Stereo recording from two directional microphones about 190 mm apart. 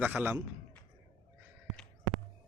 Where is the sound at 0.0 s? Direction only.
10° right (ahead or behind).